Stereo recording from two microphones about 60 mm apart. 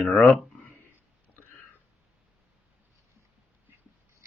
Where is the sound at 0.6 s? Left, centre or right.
Left.